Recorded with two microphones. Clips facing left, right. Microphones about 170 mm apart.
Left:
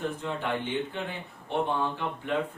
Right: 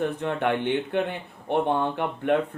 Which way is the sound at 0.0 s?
65° right (ahead or behind).